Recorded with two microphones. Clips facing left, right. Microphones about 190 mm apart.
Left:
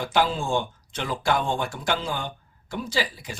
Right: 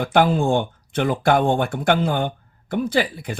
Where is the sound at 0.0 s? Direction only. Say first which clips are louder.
Right 6 dB; 55° right (ahead or behind).